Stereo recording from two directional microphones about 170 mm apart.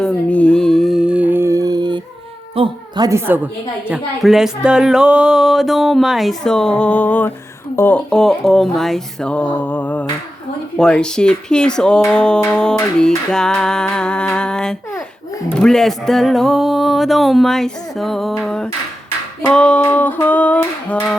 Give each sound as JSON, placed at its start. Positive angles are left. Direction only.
{"t": 0.0, "sound": "music", "side_deg": 10}
{"t": 2.6, "sound": "a woman's voice", "side_deg": -25}